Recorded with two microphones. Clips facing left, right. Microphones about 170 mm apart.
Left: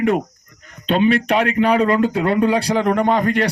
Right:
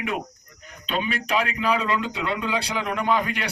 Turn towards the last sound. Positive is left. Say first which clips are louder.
# left 8 dB
turn(degrees=55)  # may be behind; listen again after turning